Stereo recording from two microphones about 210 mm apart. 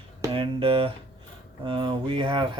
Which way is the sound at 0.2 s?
25° right (ahead or behind).